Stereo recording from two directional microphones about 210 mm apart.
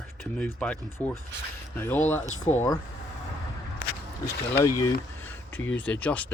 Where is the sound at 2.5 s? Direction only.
30° left (ahead or behind).